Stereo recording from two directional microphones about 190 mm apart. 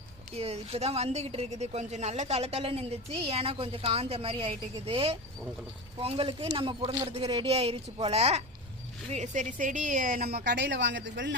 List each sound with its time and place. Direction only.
0.3 s a woman's voice: 30° right (ahead or behind); by 11.3 s 75° right (ahead or behind)